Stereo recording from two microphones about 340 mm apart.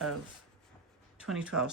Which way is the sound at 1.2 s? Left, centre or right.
Centre.